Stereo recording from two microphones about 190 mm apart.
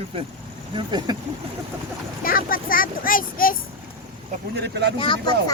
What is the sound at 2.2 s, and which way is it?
Speech, 50° left (ahead or behind).